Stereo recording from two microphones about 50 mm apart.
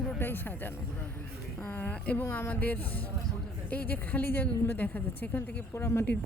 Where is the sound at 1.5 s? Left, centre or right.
Left.